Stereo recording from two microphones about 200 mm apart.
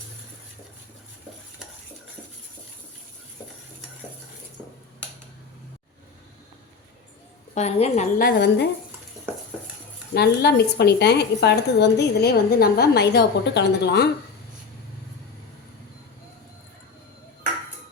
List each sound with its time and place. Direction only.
7.5 s a woman's voice: 30° left (ahead or behind)
8.2 s a woman's voice: 55° left (ahead or behind)
10.2 s a woman's voice: 55° left (ahead or behind)